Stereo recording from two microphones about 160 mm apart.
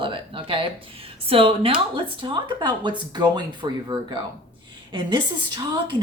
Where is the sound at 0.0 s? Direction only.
30° right (ahead or behind).